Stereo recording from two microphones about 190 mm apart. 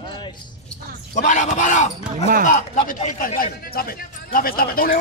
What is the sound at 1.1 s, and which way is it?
A man's voice, 40° left (ahead or behind).